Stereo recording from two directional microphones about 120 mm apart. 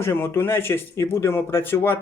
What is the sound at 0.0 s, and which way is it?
A man's voice, 20° left (ahead or behind).